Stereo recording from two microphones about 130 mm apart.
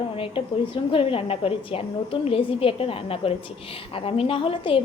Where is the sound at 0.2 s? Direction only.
45° left (ahead or behind).